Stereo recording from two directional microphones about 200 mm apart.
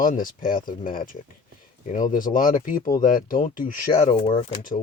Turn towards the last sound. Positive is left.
turn(degrees=25)  # may be behind; listen again after turning